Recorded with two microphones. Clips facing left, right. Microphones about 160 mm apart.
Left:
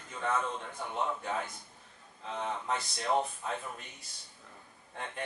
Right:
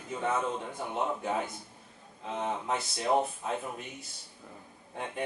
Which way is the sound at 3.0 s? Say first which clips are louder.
Right 3 dB; 10° right (ahead or behind).